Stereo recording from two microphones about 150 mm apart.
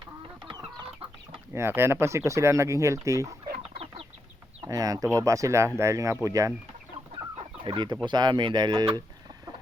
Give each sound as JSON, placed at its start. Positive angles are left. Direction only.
{"t": 1.5, "sound": "speech", "side_deg": -15}
{"t": 4.6, "sound": "speech", "side_deg": -25}
{"t": 7.6, "sound": "speech", "side_deg": -30}